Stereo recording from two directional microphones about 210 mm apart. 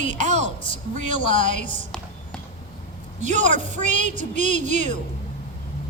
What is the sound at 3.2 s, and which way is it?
A woman's voice, 35° right (ahead or behind).